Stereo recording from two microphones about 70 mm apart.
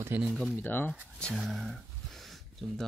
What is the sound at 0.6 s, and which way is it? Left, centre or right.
Speech, left.